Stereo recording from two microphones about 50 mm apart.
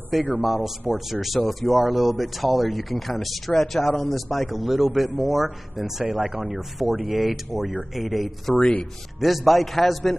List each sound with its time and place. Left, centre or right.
0.3 s a man's voice: centre
8.5 s speech: left
9.2 s a man's voice: centre